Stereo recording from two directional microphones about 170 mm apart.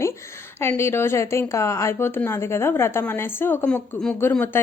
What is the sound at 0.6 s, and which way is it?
A woman's voice, 15° left (ahead or behind).